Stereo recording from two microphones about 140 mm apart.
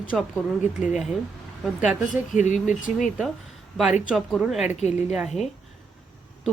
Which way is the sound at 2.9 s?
5° right (ahead or behind).